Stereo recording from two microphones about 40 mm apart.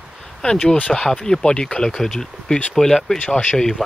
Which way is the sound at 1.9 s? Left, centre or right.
Centre.